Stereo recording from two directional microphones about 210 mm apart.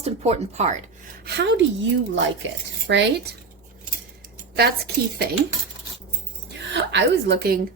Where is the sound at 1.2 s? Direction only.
55° right (ahead or behind).